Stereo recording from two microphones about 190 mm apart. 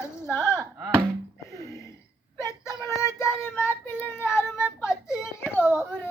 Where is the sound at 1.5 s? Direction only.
15° left (ahead or behind).